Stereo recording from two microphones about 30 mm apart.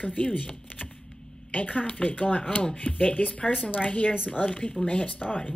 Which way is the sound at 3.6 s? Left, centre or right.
Left.